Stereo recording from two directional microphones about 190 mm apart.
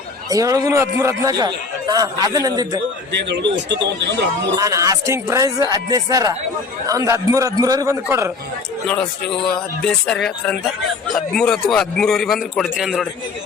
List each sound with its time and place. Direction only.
0.3 s a man's voice: 20° right (ahead or behind)
3.1 s speech: 65° right (ahead or behind)
4.5 s speech: 15° right (ahead or behind)
9.5 s a man's voice: 5° left (ahead or behind)